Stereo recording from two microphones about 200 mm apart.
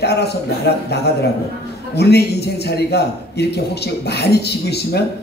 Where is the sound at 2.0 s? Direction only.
55° left (ahead or behind).